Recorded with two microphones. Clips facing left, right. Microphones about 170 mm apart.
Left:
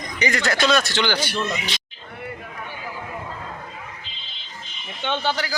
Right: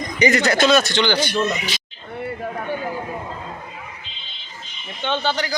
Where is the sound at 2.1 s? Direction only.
30° right (ahead or behind).